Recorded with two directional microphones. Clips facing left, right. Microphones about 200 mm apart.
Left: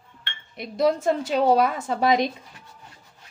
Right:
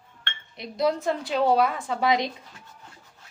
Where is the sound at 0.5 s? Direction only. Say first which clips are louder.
Left 3 dB; 50° left (ahead or behind).